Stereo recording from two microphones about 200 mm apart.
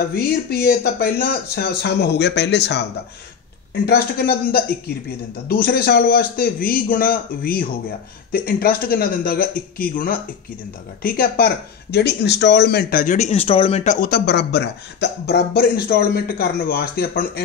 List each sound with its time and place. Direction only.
0.1 s speech: 50° left (ahead or behind)
3.8 s speech: 50° left (ahead or behind); by 13.9 s 30° left (ahead or behind)
14.0 s speech: 50° left (ahead or behind)